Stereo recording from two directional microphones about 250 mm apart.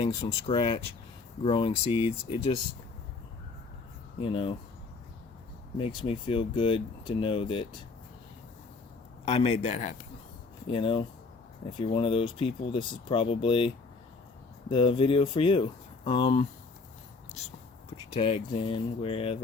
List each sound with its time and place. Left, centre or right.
0.0 s speech: left
4.2 s speech: left
5.7 s speech: centre
9.2 s speech: left
14.7 s speech: left
17.9 s speech: left